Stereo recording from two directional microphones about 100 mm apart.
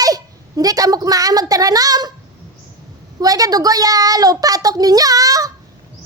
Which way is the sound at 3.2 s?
40° right (ahead or behind).